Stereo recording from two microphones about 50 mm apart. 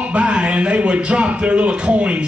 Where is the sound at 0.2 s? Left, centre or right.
Centre.